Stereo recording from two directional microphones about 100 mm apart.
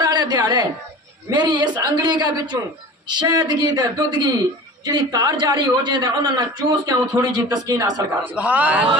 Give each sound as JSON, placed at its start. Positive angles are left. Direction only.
{"t": 0.0, "sound": "a sound", "side_deg": -45}
{"t": 1.3, "sound": "a man's voice", "side_deg": -45}
{"t": 8.3, "sound": "a man's voice", "side_deg": -15}